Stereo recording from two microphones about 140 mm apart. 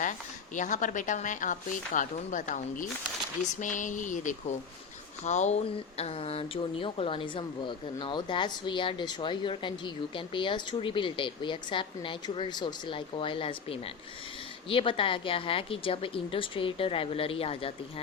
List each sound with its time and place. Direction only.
0.0 s speech: 65° left (ahead or behind)
5.2 s speech: 55° left (ahead or behind)